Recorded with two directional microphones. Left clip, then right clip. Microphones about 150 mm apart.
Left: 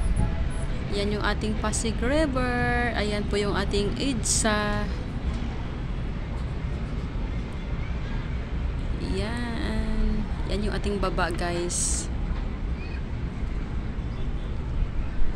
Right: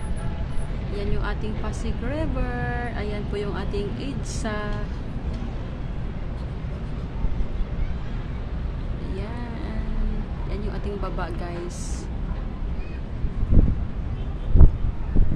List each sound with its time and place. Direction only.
0.9 s speech: 30° left (ahead or behind)
10.5 s speech: 25° left (ahead or behind)